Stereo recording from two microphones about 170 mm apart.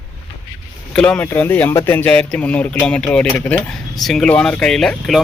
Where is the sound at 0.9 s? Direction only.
5° left (ahead or behind).